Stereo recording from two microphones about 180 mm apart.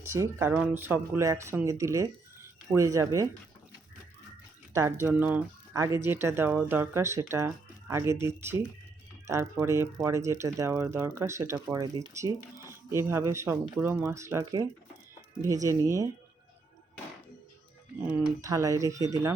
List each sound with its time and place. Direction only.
0.0 s speech: 15° right (ahead or behind)
4.7 s speech: 15° right (ahead or behind)
18.1 s speech: 15° right (ahead or behind)